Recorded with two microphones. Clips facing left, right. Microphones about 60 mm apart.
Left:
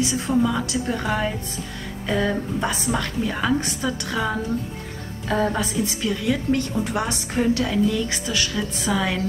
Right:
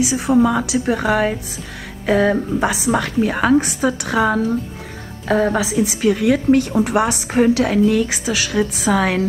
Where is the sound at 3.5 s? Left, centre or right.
Right.